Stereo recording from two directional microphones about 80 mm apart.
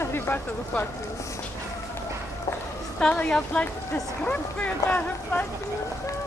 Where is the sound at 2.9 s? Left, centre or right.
Centre.